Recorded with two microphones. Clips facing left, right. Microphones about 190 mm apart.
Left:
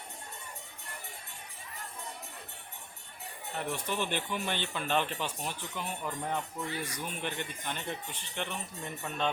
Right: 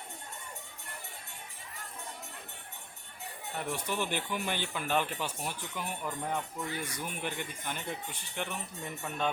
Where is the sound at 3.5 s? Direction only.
10° right (ahead or behind).